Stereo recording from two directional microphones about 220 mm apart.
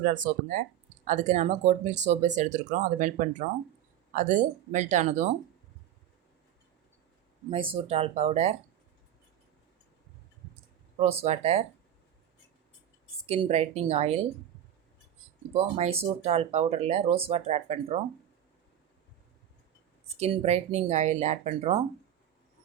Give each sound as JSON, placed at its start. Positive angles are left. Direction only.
{"t": 0.3, "sound": "speech", "side_deg": -35}
{"t": 7.5, "sound": "speech", "side_deg": -25}
{"t": 11.0, "sound": "speech", "side_deg": -30}
{"t": 13.2, "sound": "speech", "side_deg": -30}
{"t": 15.5, "sound": "speech", "side_deg": -30}
{"t": 20.1, "sound": "speech", "side_deg": -30}